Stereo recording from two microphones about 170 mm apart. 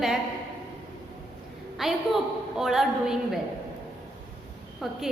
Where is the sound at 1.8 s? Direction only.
Centre (ahead or behind).